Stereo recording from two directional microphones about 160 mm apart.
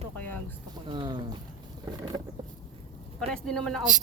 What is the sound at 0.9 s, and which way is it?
Speech, 30° right (ahead or behind).